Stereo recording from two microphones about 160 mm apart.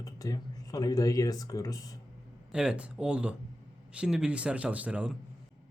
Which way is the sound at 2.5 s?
5° right (ahead or behind).